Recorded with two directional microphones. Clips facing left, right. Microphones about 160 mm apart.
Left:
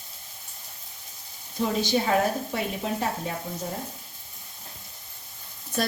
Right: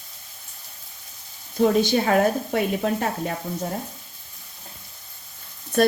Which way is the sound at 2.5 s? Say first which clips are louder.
Right 6 dB; 55° right (ahead or behind).